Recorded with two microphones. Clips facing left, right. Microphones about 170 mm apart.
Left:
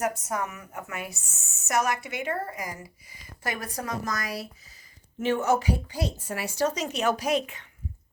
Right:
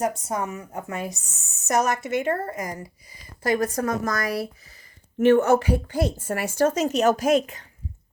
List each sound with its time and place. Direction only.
0.0 s a woman's voice: 30° right (ahead or behind)